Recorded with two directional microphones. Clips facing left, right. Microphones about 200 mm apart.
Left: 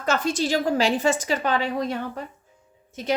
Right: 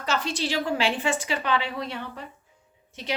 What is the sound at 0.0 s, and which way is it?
A woman's voice, 50° left (ahead or behind).